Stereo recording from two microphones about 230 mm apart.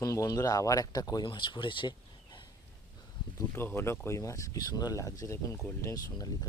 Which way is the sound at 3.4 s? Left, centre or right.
Centre.